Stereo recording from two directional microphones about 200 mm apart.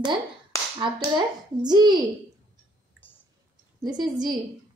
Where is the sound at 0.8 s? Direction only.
20° right (ahead or behind).